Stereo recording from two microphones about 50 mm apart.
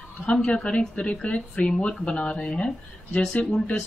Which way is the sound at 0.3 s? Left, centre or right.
Left.